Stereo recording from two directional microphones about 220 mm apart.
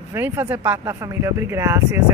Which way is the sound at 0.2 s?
10° right (ahead or behind).